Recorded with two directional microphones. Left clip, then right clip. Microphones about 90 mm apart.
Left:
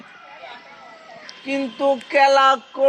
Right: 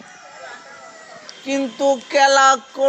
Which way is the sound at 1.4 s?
10° right (ahead or behind).